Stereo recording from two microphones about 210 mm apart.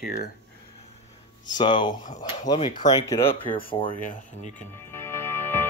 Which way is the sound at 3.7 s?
25° left (ahead or behind).